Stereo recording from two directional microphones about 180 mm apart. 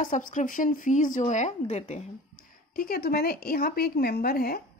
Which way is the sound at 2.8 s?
60° left (ahead or behind).